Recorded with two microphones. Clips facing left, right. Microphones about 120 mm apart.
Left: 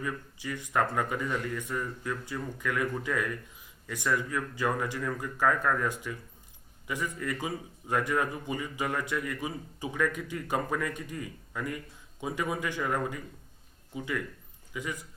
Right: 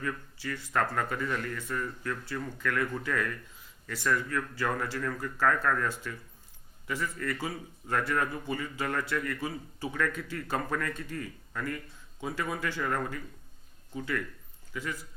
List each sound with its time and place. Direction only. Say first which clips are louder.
0.0 s a man's voice: even; 15° left (ahead or behind)